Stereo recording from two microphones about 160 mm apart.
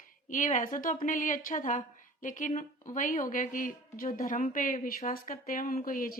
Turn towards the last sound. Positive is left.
turn(degrees=60)  # may be behind; listen again after turning